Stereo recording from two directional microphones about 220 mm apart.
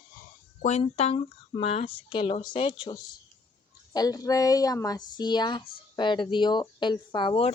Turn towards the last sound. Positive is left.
turn(degrees=25)  # may be behind; listen again after turning